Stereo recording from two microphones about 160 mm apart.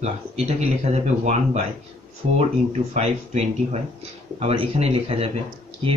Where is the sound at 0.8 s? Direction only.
45° right (ahead or behind).